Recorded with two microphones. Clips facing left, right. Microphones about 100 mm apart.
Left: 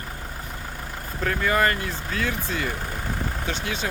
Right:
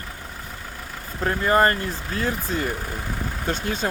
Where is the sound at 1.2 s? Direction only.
35° right (ahead or behind).